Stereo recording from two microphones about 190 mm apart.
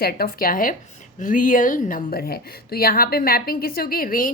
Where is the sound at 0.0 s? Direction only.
50° left (ahead or behind).